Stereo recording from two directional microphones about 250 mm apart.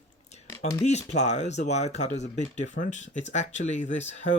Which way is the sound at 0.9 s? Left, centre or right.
Left.